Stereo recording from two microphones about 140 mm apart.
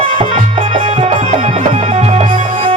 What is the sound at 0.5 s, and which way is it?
Music, 50° right (ahead or behind).